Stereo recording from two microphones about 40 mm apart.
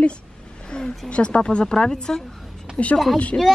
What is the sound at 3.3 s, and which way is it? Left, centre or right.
Speech, left.